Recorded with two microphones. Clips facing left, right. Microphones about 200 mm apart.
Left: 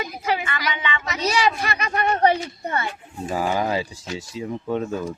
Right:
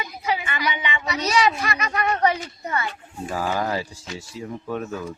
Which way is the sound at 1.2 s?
30° left (ahead or behind).